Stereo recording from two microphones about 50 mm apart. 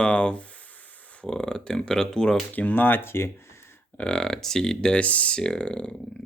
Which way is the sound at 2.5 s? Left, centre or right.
Left.